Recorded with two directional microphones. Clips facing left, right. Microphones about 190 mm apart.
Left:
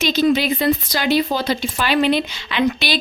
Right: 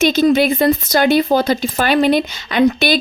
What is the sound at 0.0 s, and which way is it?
A woman's voice, 45° right (ahead or behind).